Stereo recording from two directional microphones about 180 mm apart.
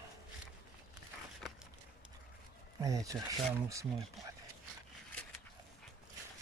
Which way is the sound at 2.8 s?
20° right (ahead or behind).